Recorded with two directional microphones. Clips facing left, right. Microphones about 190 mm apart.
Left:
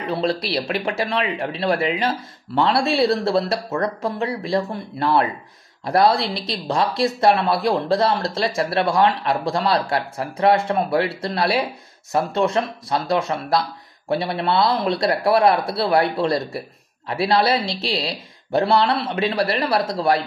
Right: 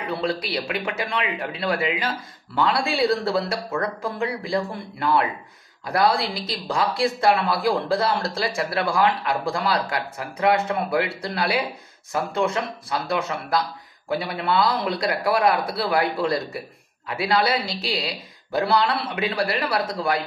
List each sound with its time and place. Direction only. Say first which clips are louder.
0.0 s speech: left 3 dB; 25° left (ahead or behind)
14.0 s speech: left 3 dB; 25° left (ahead or behind)